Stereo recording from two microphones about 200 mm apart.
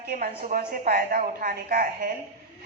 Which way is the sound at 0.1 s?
45° right (ahead or behind).